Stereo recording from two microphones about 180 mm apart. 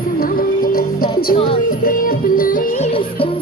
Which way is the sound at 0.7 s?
55° left (ahead or behind).